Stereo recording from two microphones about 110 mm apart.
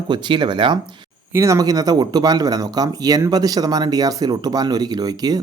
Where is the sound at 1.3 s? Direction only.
25° right (ahead or behind).